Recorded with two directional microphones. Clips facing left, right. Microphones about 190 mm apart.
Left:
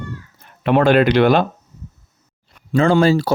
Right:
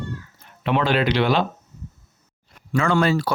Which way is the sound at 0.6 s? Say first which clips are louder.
Left 7 dB; 50° left (ahead or behind).